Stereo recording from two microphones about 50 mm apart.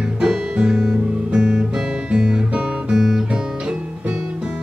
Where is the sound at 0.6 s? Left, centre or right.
Centre.